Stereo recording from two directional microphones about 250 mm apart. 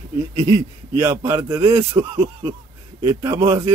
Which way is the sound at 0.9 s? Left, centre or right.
Centre.